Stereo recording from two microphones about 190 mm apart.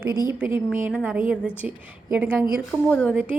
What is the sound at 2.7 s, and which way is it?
Speech, 5° left (ahead or behind).